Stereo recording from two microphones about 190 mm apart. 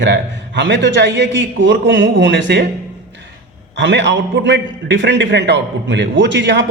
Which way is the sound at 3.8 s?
65° right (ahead or behind).